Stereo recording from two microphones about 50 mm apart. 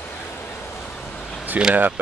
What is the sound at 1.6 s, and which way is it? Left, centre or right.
Speech, right.